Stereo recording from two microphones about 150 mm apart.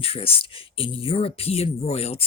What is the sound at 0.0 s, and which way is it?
Speech, 40° left (ahead or behind).